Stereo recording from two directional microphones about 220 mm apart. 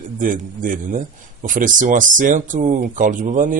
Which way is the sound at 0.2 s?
40° right (ahead or behind).